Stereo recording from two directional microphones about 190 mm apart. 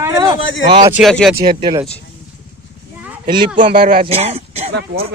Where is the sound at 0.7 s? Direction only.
20° right (ahead or behind).